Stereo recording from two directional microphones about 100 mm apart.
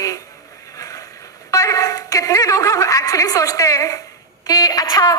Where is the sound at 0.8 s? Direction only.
35° left (ahead or behind).